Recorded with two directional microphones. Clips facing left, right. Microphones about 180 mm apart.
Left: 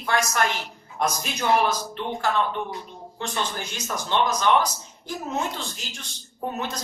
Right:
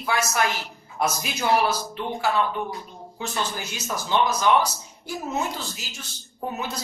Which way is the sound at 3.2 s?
5° right (ahead or behind).